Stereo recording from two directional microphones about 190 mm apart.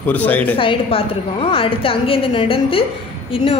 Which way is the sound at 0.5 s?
30° left (ahead or behind).